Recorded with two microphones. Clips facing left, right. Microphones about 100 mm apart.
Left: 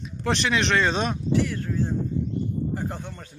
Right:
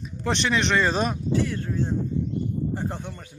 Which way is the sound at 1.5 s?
20° right (ahead or behind).